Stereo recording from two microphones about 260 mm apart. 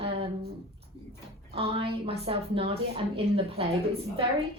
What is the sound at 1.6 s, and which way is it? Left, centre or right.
A woman's voice, right.